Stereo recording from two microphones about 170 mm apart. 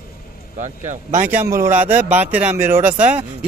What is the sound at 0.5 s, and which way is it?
Speech, 45° right (ahead or behind).